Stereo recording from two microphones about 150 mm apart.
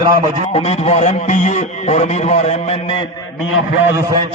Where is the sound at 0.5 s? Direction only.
45° left (ahead or behind).